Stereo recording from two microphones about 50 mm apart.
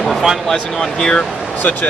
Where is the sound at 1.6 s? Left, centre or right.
Left.